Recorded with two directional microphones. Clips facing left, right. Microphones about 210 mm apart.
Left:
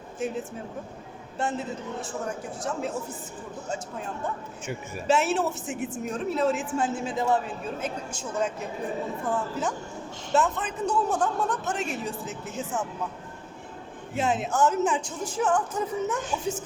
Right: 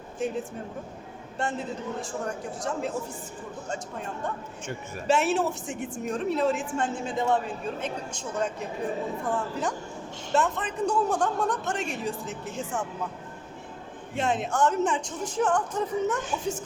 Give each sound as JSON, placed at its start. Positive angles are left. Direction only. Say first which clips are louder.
{"t": 0.2, "sound": "a man's voice", "louder": "right 1 dB", "side_deg": 5}
{"t": 1.4, "sound": "a man's voice", "louder": "left 1 dB", "side_deg": 0}
{"t": 14.2, "sound": "speech", "louder": "left 1 dB", "side_deg": 5}